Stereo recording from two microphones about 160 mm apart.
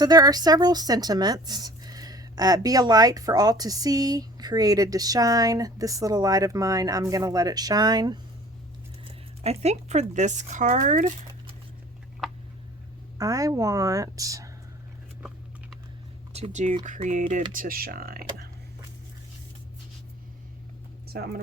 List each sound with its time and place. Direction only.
0.0 s a woman's voice: 25° right (ahead or behind)
9.4 s speech: 40° right (ahead or behind)
13.1 s a woman's voice: 20° right (ahead or behind)
16.3 s speech: 45° right (ahead or behind); by 18.4 s 70° right (ahead or behind)
21.1 s speech: 75° right (ahead or behind)